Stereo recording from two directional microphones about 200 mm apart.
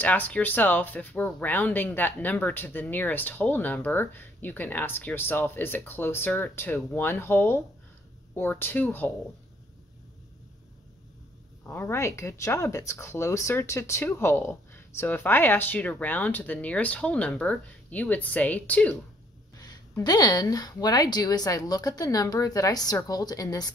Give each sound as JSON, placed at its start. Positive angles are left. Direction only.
{"t": 0.0, "sound": "speech", "side_deg": 10}
{"t": 11.6, "sound": "speech", "side_deg": 10}
{"t": 19.5, "sound": "a woman's voice", "side_deg": 20}